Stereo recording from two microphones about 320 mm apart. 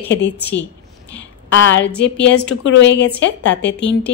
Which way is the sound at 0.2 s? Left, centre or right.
Left.